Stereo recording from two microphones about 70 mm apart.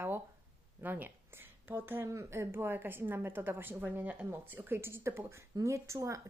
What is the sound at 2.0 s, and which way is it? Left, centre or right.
Speech, right.